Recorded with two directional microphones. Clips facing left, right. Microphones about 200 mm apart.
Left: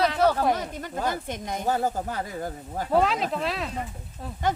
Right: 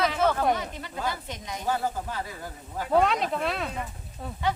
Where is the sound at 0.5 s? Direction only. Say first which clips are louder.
Left 3 dB; 45° left (ahead or behind).